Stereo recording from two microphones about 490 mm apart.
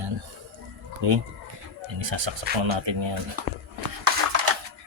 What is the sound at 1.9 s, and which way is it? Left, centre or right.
Speech, right.